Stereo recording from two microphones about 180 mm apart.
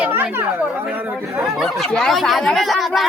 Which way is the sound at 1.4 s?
Centre (ahead or behind).